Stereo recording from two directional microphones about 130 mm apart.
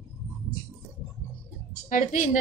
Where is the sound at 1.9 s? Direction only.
80° left.